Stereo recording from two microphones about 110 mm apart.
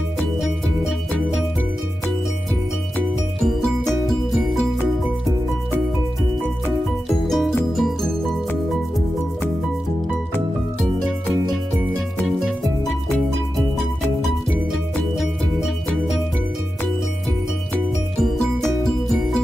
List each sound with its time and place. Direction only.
0.4 s music: centre (ahead or behind)
3.4 s music: centre (ahead or behind)
7.1 s music: centre (ahead or behind)
12.4 s music: centre (ahead or behind)
15.1 s music: centre (ahead or behind)